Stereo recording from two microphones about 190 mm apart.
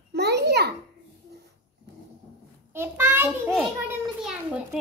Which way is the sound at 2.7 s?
10° right (ahead or behind).